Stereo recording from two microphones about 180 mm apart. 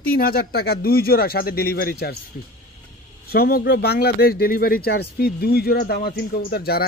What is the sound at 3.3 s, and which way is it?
Speech, 60° left (ahead or behind).